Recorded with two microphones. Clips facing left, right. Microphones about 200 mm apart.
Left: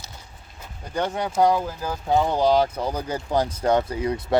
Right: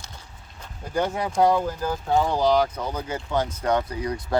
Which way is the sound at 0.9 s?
5° right (ahead or behind).